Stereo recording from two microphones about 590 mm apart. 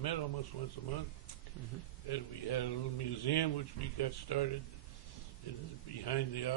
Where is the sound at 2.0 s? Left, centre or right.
Left.